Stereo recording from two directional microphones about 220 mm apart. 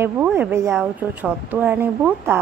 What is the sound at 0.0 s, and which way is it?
Speech, 10° right (ahead or behind).